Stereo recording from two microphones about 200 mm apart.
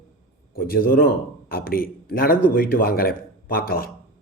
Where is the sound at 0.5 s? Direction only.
45° left (ahead or behind).